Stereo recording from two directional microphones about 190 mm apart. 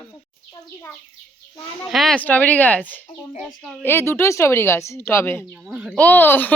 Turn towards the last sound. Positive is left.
turn(degrees=10)  # may be behind; listen again after turning